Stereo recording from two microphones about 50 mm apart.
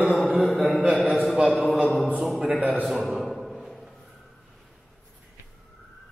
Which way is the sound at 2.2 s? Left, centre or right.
Centre.